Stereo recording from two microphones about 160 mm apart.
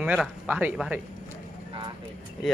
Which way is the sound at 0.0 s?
5° right (ahead or behind).